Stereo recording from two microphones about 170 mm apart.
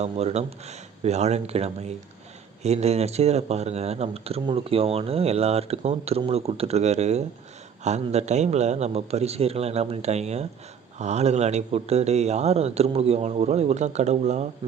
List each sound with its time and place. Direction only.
0.0 s speech: 40° right (ahead or behind)